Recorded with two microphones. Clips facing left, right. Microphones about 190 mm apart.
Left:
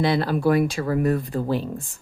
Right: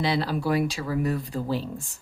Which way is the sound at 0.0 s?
55° left (ahead or behind).